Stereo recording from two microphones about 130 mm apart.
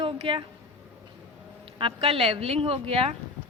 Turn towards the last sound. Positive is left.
turn(degrees=-50)  # may be behind; listen again after turning